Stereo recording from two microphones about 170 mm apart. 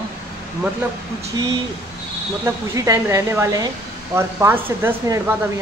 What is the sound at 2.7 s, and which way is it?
Speech, 20° right (ahead or behind).